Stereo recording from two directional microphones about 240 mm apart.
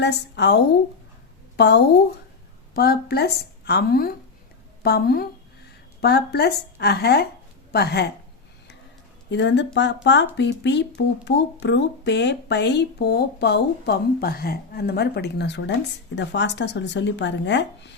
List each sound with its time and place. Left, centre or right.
0.0 s a woman's voice: left
9.3 s speech: left